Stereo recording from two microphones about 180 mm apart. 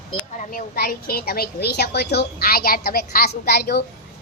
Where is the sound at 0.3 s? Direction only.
50° left (ahead or behind).